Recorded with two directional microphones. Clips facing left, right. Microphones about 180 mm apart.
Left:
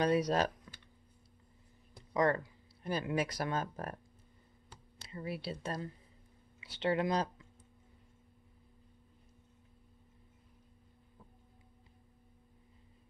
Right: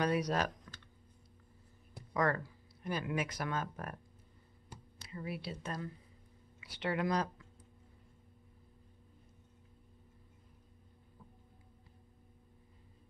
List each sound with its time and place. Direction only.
0.0 s speech: 30° left (ahead or behind)
2.1 s speech: 25° left (ahead or behind)
4.9 s speech: 30° left (ahead or behind)